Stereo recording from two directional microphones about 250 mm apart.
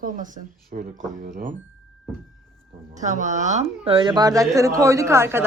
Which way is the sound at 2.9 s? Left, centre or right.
Right.